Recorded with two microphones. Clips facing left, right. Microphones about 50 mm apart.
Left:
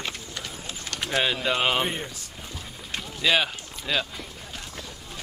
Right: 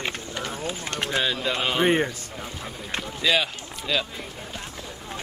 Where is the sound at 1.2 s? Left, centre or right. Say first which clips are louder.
Left 1 dB; centre.